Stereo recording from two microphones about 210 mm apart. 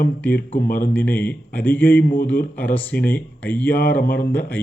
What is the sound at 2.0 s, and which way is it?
Speech, 45° left (ahead or behind).